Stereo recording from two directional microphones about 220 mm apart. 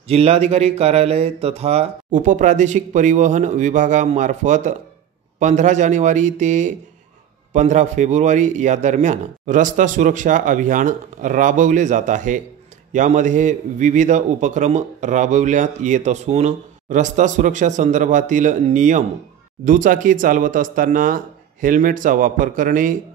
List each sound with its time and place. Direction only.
0.1 s a man's voice: 30° right (ahead or behind)